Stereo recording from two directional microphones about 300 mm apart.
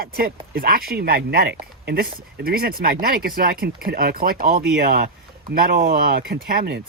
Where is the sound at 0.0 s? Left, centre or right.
Right.